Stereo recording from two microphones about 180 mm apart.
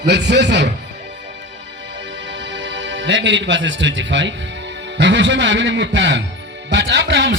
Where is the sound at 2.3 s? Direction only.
80° right.